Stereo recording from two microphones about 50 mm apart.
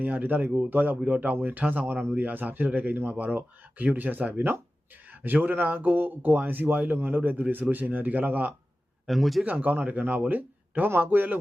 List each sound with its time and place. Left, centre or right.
0.0 s speech: right
9.0 s a man's voice: centre
9.5 s speech: right